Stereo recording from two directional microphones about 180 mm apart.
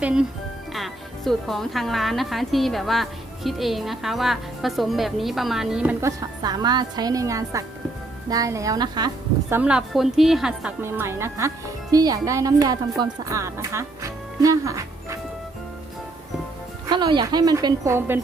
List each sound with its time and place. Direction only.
0.0 s speech: 5° right (ahead or behind); by 9.6 s 20° right (ahead or behind)
9.6 s a woman's voice: 5° right (ahead or behind)
16.9 s a woman's voice: 25° right (ahead or behind)